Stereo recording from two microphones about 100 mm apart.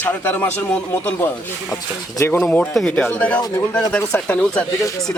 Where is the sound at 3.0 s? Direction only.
15° left (ahead or behind).